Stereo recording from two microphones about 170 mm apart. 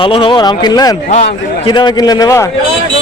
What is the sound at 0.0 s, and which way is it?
Speech, 30° left (ahead or behind).